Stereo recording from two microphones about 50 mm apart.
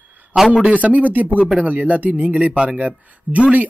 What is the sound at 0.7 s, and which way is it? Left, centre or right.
Speech, right.